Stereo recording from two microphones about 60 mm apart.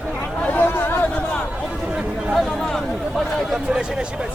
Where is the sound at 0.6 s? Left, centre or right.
Left.